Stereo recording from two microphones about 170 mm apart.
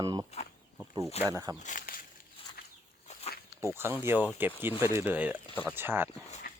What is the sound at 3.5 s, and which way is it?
Speech, 15° right (ahead or behind).